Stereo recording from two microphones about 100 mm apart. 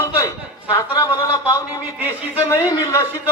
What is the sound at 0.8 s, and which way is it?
A man's voice, 35° left (ahead or behind).